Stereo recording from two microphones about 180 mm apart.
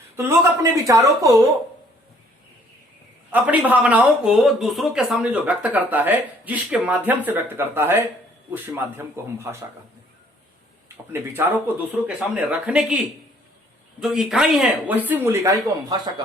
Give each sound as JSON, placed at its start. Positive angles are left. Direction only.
{"t": 0.2, "sound": "speech", "side_deg": -15}
{"t": 3.3, "sound": "speech", "side_deg": -10}
{"t": 10.8, "sound": "speech", "side_deg": -15}
{"t": 14.0, "sound": "speech", "side_deg": 0}